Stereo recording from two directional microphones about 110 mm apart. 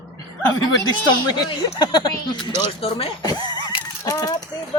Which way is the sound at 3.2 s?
40° left (ahead or behind).